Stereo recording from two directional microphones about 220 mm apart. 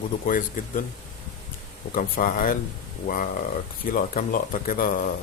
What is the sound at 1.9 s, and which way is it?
Speech, 40° left (ahead or behind).